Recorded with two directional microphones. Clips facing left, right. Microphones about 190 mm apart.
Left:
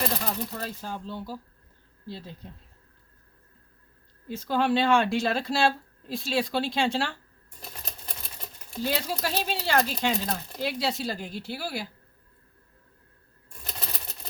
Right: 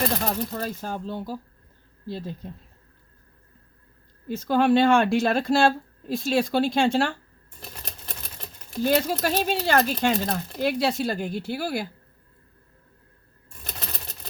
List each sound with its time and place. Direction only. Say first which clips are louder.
0.2 s speech: right 5 dB; 50° right (ahead or behind)
4.3 s speech: right 5 dB; 50° right (ahead or behind)
8.8 s speech: right 7 dB; 50° right (ahead or behind)